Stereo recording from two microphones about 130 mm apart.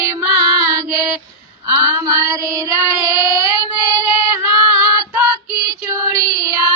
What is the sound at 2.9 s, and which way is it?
Child singing, 25° right (ahead or behind).